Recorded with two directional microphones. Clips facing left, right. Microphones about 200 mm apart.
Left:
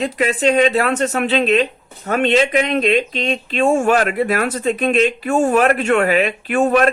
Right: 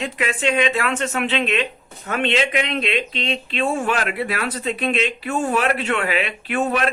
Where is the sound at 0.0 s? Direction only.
40° left (ahead or behind).